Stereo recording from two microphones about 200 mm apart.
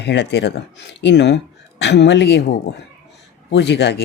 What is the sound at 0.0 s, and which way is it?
Speech, 60° left (ahead or behind).